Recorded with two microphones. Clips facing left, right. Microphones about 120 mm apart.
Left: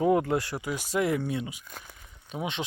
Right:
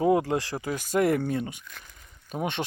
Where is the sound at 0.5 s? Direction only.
45° right (ahead or behind).